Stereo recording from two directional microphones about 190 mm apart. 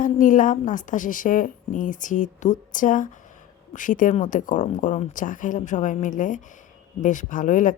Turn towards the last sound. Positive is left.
turn(degrees=45)  # may be behind; listen again after turning